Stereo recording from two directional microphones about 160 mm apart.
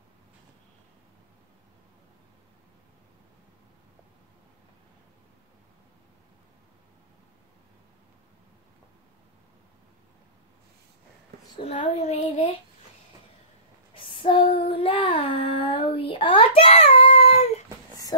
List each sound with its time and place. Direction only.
11.5 s child singing: 35° left (ahead or behind)
14.5 s child singing: 35° left (ahead or behind)